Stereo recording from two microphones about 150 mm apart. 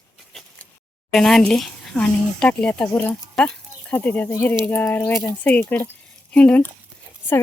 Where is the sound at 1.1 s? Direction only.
5° left (ahead or behind).